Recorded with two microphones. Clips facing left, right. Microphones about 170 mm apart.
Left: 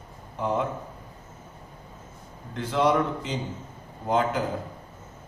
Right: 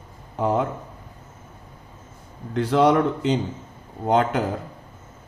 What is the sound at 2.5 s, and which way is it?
Speech, 75° right (ahead or behind).